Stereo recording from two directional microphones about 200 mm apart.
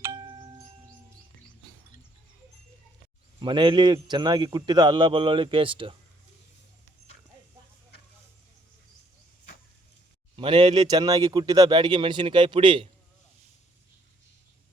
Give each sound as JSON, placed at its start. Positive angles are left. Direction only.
{"t": 0.0, "sound": "chime", "side_deg": -15}
{"t": 3.4, "sound": "speech", "side_deg": -25}
{"t": 10.3, "sound": "speech", "side_deg": -25}